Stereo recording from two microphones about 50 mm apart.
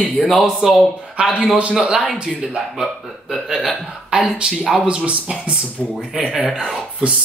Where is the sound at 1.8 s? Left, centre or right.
Centre.